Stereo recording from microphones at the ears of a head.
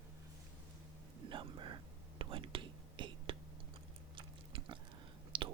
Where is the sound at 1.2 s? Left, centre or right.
Right.